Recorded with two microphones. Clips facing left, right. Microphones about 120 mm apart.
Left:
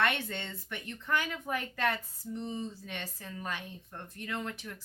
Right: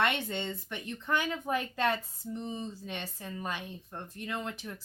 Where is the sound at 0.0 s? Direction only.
20° right (ahead or behind).